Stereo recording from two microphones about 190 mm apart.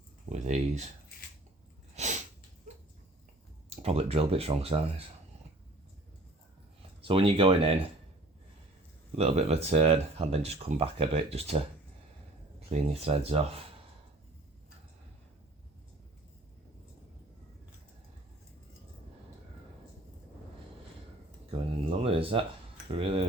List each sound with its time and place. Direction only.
0.3 s a sound: 40° right (ahead or behind)
2.0 s sneeze: 35° right (ahead or behind)
3.7 s speech: 30° right (ahead or behind)
7.0 s speech: 30° right (ahead or behind)
9.1 s speech: 35° right (ahead or behind)
21.8 s a sound: 30° right (ahead or behind)
22.9 s speech: 30° right (ahead or behind)